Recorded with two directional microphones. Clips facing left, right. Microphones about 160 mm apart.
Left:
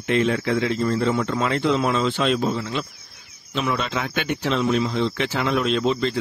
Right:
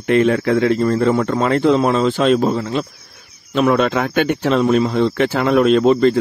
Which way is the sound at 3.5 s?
55° right (ahead or behind).